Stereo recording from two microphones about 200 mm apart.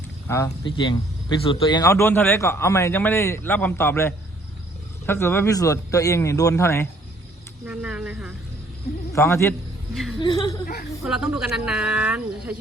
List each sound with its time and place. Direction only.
0.3 s speech: 15° left (ahead or behind)
7.6 s speech: 5° right (ahead or behind)
9.1 s speech: 15° left (ahead or behind)
9.9 s speech: centre (ahead or behind)
10.2 s speech: 20° left (ahead or behind)
11.0 s speech: centre (ahead or behind)